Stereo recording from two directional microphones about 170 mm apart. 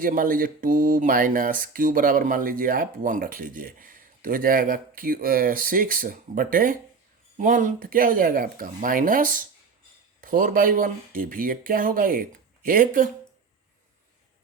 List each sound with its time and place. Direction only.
0.0 s speech: 55° right (ahead or behind)